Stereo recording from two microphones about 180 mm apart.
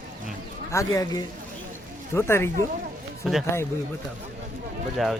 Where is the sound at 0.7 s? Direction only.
20° left (ahead or behind).